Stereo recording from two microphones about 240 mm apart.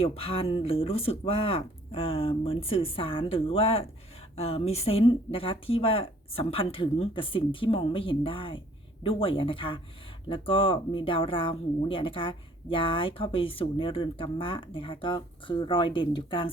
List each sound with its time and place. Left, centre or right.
0.0 s speech: left